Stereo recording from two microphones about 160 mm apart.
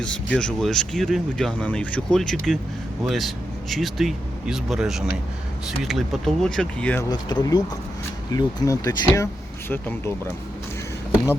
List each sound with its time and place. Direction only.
0.0 s speech: 5° left (ahead or behind)
7.1 s speech: 25° left (ahead or behind)